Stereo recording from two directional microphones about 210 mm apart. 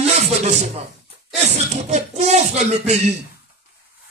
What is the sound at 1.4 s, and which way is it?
Speech, 30° right (ahead or behind).